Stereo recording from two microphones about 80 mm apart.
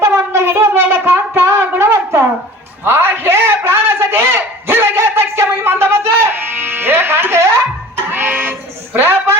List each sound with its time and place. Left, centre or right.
0.0 s wind instrument: right
1.7 s shofar: right
2.8 s a sound: right
7.9 s music: right